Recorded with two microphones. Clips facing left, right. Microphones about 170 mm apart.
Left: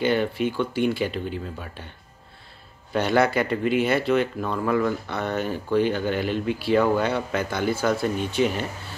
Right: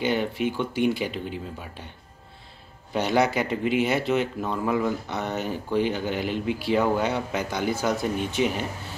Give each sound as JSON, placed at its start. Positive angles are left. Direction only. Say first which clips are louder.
{"t": 0.0, "sound": "speech", "louder": "left 2 dB", "side_deg": -15}
{"t": 2.9, "sound": "speech", "louder": "left 2 dB", "side_deg": -15}